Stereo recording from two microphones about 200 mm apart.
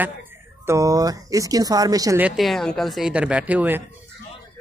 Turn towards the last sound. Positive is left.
turn(degrees=-10)  # may be behind; listen again after turning